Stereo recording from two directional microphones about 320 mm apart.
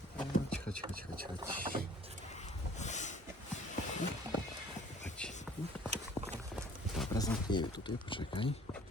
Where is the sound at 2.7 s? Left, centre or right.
Left.